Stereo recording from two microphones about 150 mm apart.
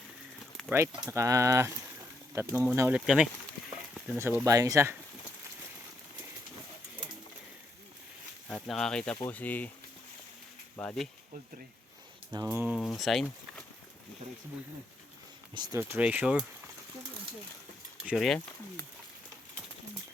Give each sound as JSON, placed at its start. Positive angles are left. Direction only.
{"t": 1.1, "sound": "speech", "side_deg": -20}
{"t": 4.2, "sound": "speech", "side_deg": -15}
{"t": 8.4, "sound": "speech", "side_deg": 5}
{"t": 10.8, "sound": "speech", "side_deg": 5}
{"t": 12.3, "sound": "speech", "side_deg": -20}
{"t": 12.7, "sound": "speech", "side_deg": 0}
{"t": 15.5, "sound": "speech", "side_deg": -30}
{"t": 16.0, "sound": "speech", "side_deg": -10}
{"t": 18.0, "sound": "speech", "side_deg": 0}